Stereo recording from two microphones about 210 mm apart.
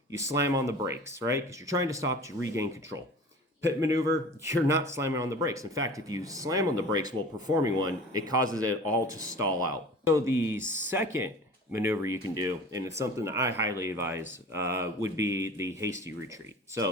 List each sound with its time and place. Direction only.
0.1 s speech: 15° right (ahead or behind)